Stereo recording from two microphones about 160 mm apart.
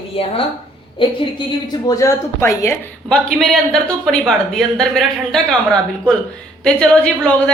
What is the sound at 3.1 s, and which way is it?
A woman's voice, centre (ahead or behind).